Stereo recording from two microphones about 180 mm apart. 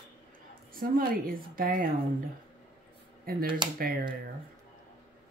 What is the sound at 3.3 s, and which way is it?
Speech, 55° right (ahead or behind).